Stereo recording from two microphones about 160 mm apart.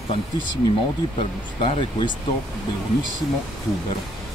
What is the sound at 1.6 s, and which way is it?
Speech, 30° left (ahead or behind).